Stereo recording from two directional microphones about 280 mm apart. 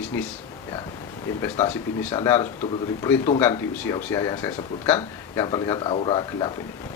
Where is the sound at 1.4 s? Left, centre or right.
Centre.